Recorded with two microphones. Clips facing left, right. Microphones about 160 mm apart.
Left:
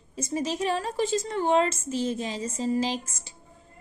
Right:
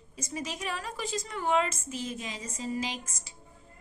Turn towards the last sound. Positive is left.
turn(degrees=30)  # may be behind; listen again after turning